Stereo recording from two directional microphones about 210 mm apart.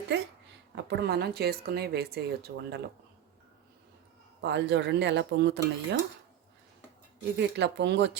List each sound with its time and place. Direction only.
0.8 s a woman's voice: 50° right (ahead or behind)
4.4 s speech: 55° right (ahead or behind)
7.3 s speech: 55° right (ahead or behind)